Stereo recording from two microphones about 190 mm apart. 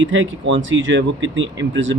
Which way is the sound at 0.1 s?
80° right.